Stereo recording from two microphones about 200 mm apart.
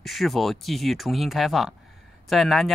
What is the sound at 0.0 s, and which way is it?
Speech, centre (ahead or behind).